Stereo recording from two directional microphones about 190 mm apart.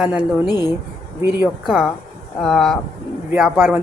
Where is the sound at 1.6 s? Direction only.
Centre (ahead or behind).